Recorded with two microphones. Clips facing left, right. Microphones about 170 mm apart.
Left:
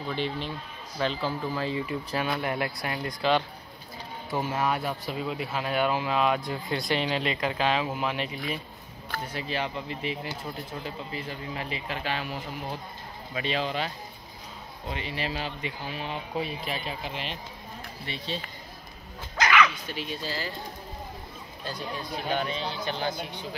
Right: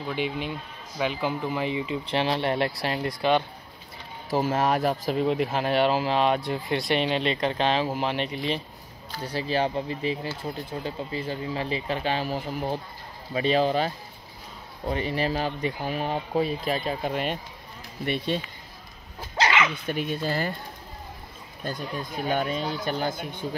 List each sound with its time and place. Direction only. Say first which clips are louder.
0.1 s speech: right 2 dB; 10° right (ahead or behind); by 3.2 s 30° right (ahead or behind)
3.2 s speech: right 2 dB; 20° right (ahead or behind)
4.3 s speech: right 5 dB; 40° right (ahead or behind); by 18.4 s 55° right (ahead or behind)
19.3 s dog: even; 25° right (ahead or behind)
19.7 s speech: right 6 dB; 50° right (ahead or behind)
21.6 s speech: right 3 dB; 50° right (ahead or behind)
22.6 s speech: right 3 dB; 10° right (ahead or behind)
22.8 s speech: right 3 dB; 45° right (ahead or behind)